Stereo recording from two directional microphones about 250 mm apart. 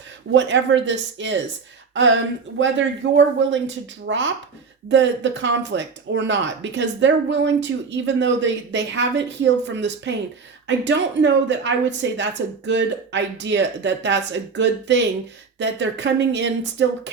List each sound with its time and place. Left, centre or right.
0.3 s speech: right